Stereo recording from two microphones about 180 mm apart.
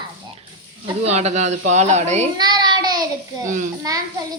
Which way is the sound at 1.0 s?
35° right (ahead or behind).